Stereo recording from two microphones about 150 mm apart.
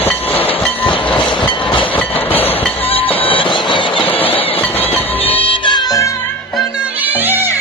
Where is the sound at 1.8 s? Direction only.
10° left (ahead or behind).